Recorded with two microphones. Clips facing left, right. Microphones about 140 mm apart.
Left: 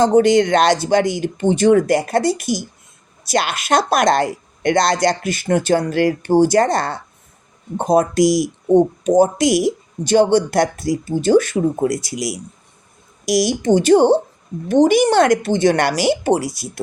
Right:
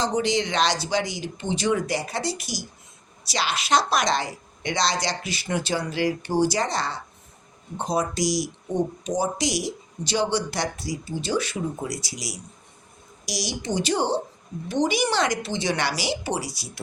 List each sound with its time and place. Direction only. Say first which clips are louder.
0.0 s speech: left 11 dB; 55° left (ahead or behind)